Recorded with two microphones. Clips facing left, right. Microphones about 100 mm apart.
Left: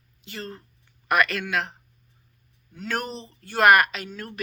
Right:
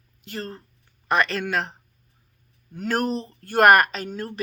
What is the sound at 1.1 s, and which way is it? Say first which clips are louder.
Speech: right 1 dB; 30° right (ahead or behind).